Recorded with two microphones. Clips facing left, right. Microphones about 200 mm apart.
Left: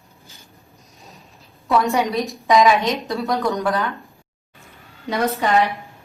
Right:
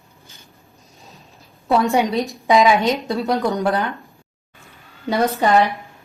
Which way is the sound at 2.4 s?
25° right (ahead or behind).